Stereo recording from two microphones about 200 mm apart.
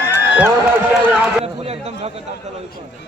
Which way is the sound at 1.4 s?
30° right (ahead or behind).